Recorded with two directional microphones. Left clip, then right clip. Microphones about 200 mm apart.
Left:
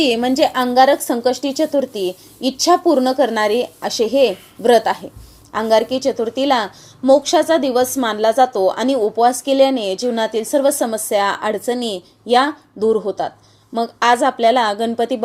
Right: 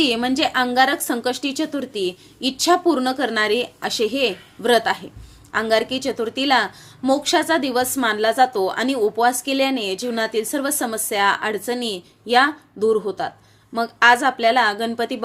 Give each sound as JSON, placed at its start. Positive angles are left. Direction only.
{"t": 0.0, "sound": "a woman's voice", "side_deg": 0}